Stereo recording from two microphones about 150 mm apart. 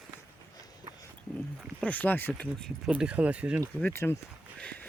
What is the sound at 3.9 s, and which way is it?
Speech, 15° left (ahead or behind).